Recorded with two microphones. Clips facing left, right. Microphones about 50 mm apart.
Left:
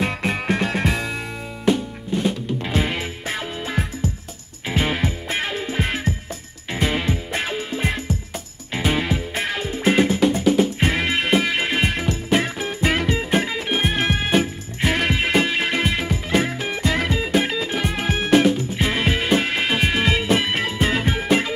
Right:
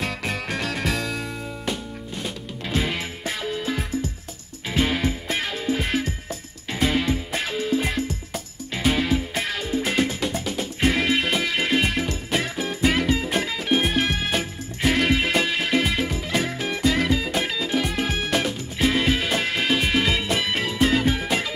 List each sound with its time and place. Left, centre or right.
0.0 s music: centre
1.7 s music: centre